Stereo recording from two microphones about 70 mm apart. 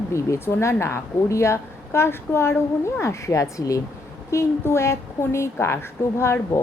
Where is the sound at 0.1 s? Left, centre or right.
Left.